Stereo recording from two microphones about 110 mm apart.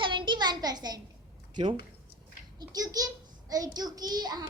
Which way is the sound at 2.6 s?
35° right (ahead or behind).